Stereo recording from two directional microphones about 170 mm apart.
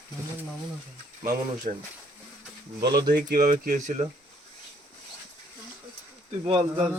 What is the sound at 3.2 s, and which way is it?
Speech, 55° right (ahead or behind).